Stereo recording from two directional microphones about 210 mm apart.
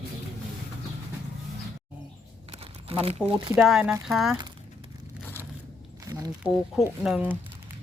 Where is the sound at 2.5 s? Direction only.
30° right (ahead or behind).